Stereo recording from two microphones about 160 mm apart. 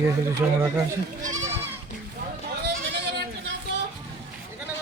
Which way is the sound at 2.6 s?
90° right.